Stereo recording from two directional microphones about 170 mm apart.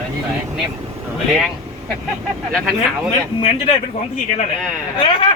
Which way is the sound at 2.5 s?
Centre (ahead or behind).